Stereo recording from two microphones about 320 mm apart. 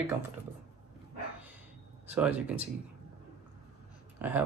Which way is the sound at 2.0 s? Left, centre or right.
Centre.